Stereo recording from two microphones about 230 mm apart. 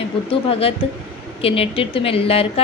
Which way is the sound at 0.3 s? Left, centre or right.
Left.